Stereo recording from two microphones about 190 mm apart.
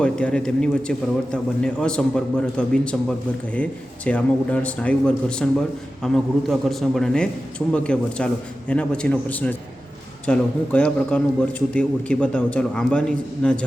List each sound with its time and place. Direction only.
0.0 s a man's voice: 5° left (ahead or behind)